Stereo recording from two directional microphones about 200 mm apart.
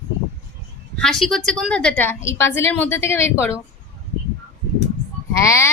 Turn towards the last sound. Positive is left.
turn(degrees=15)  # may be behind; listen again after turning